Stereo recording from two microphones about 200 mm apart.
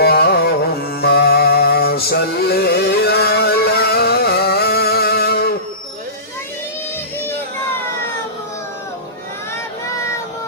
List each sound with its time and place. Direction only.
0.0 s carnatic music: 50° left (ahead or behind)